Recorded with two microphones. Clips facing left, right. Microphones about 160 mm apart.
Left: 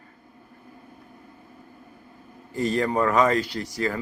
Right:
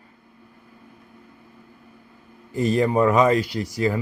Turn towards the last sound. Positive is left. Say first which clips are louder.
# right 4 dB
turn(degrees=-15)  # may be behind; listen again after turning